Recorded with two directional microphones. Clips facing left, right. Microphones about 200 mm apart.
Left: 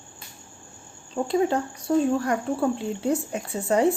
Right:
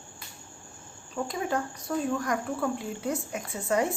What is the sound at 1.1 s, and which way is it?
Speech, 30° left (ahead or behind).